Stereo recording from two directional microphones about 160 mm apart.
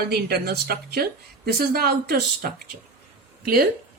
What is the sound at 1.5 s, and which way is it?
Speech, 70° right (ahead or behind).